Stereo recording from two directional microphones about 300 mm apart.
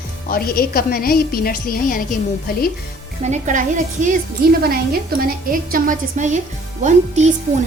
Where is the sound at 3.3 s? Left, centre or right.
Right.